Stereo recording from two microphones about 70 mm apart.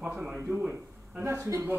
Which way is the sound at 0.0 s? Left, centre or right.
Centre.